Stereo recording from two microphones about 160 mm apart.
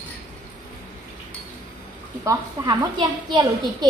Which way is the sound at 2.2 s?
25° right (ahead or behind).